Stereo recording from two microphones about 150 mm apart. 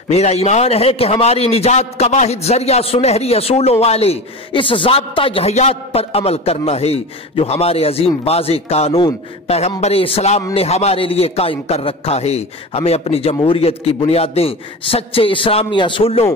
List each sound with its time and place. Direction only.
0.1 s a man's voice: 45° left (ahead or behind)